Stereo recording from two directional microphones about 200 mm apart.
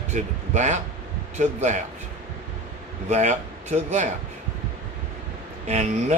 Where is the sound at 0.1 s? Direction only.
35° right (ahead or behind).